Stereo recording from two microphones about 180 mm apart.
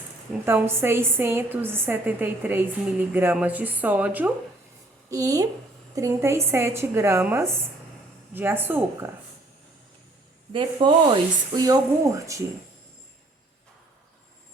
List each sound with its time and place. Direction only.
0.4 s a woman's voice: 15° right (ahead or behind)
10.5 s speech: 25° right (ahead or behind)